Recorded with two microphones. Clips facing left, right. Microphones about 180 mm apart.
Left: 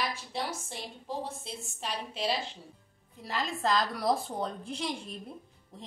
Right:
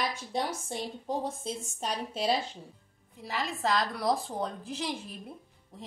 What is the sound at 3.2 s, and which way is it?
A woman's voice, centre (ahead or behind).